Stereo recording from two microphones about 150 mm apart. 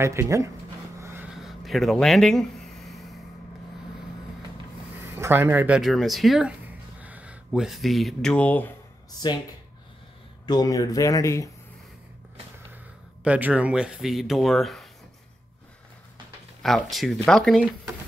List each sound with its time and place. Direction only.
0.0 s speech: 20° right (ahead or behind)
0.9 s vehicle: 15° right (ahead or behind)
1.3 s a sound: centre (ahead or behind)
5.0 s speech: 15° right (ahead or behind)
5.8 s speech: centre (ahead or behind)
10.4 s speech: 25° left (ahead or behind)
13.2 s speech: 10° right (ahead or behind)
16.6 s speech: centre (ahead or behind)